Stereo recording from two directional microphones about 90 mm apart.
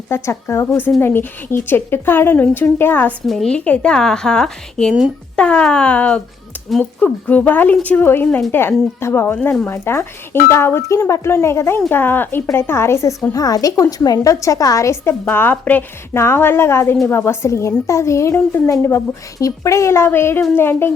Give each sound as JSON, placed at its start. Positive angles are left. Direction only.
{"t": 0.1, "sound": "speech", "side_deg": 30}
{"t": 3.2, "sound": "a woman's voice", "side_deg": 5}
{"t": 13.3, "sound": "a woman's voice", "side_deg": 45}
{"t": 15.2, "sound": "a woman's voice", "side_deg": 20}
{"t": 18.3, "sound": "speech", "side_deg": 20}
{"t": 19.4, "sound": "speech", "side_deg": 40}